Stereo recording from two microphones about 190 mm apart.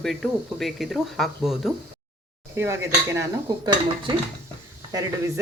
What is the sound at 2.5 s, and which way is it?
Speech, 15° right (ahead or behind).